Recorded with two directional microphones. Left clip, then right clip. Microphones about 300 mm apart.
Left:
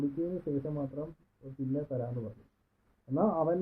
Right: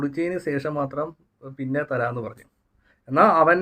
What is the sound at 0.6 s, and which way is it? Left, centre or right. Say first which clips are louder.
Speech: right 12 dB; right.